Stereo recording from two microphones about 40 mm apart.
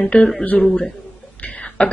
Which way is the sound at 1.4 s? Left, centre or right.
Left.